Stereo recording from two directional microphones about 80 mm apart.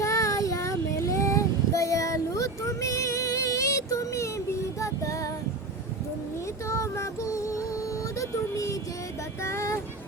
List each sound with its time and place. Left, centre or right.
0.0 s child singing: left
6.7 s music: left
9.4 s vehicle: left